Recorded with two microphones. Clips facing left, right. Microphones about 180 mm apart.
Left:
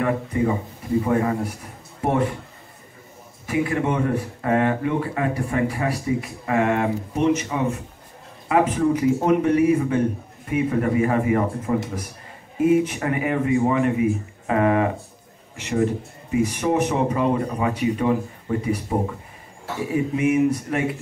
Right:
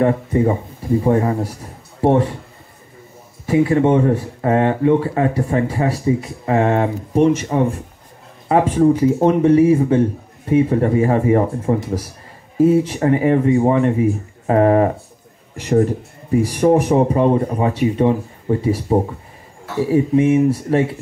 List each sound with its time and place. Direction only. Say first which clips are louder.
1.0 s speech: right 6 dB; 30° right (ahead or behind)
3.4 s a man's voice: right 8 dB; 30° right (ahead or behind)